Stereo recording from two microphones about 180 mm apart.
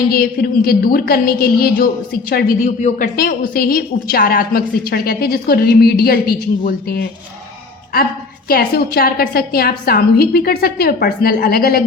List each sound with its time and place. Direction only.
0.1 s a woman's voice: 60° left (ahead or behind)
2.6 s a woman's voice: 45° left (ahead or behind)
8.4 s a woman's voice: 60° left (ahead or behind)